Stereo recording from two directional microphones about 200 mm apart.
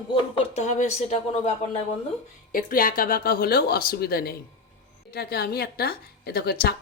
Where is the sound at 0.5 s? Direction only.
35° left (ahead or behind).